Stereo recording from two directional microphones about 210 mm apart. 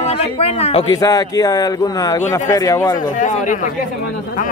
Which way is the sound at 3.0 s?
35° left (ahead or behind).